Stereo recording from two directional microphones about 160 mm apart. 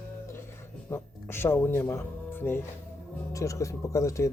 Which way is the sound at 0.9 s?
15° left (ahead or behind).